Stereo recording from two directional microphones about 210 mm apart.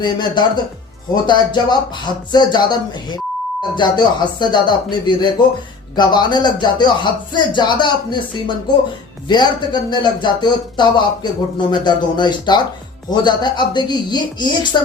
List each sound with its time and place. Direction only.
0.0 s speech: 20° left (ahead or behind)